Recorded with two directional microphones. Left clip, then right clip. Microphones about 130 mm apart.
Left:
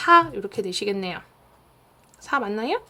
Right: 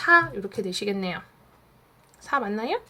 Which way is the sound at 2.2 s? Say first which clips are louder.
Left 2 dB; 25° left (ahead or behind).